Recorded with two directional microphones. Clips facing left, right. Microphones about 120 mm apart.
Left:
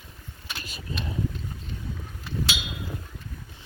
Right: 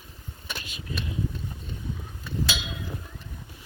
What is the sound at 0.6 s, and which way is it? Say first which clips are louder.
Vehicle: left 2 dB; 40° left (ahead or behind).